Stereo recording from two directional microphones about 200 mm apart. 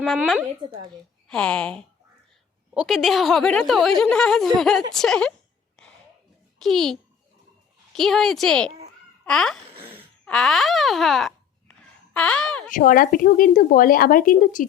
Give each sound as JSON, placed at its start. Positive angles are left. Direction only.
{"t": 0.2, "sound": "speech", "side_deg": -10}
{"t": 1.3, "sound": "speech", "side_deg": 5}
{"t": 6.6, "sound": "speech", "side_deg": 0}
{"t": 12.6, "sound": "a woman's voice", "side_deg": 40}